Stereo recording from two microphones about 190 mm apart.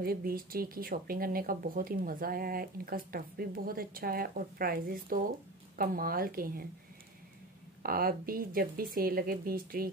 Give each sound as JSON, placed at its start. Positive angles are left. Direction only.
{"t": 0.0, "sound": "speech", "side_deg": -50}
{"t": 7.8, "sound": "speech", "side_deg": -50}